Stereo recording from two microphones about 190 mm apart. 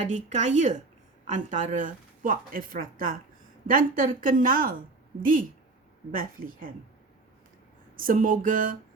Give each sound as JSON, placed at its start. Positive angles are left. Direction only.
{"t": 0.0, "sound": "a woman's voice", "side_deg": -40}
{"t": 7.9, "sound": "a woman's voice", "side_deg": -45}